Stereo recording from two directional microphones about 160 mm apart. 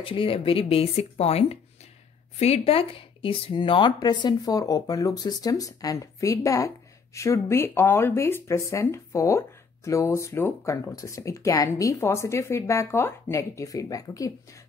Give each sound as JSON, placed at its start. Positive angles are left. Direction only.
{"t": 0.0, "sound": "speech", "side_deg": 35}